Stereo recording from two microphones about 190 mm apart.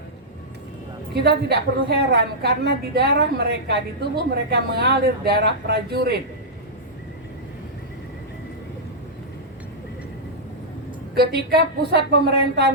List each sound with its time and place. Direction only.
1.2 s a woman's voice: 60° right (ahead or behind)
11.1 s a woman's voice: 60° right (ahead or behind)